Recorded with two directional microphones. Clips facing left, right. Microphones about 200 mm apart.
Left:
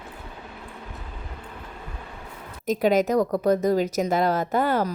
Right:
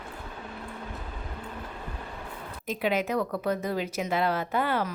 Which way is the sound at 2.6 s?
40° left (ahead or behind).